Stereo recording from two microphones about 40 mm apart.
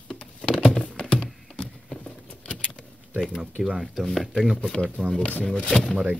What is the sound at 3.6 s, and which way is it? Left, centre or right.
Speech, centre.